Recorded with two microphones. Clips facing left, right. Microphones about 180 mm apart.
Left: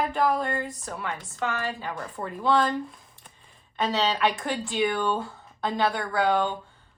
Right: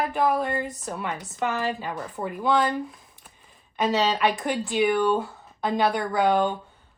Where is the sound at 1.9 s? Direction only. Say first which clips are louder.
Right 3 dB; 5° right (ahead or behind).